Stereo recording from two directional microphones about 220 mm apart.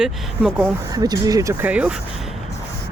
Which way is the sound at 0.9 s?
15° right (ahead or behind).